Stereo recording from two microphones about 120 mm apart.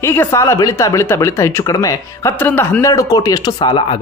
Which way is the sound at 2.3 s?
15° left (ahead or behind).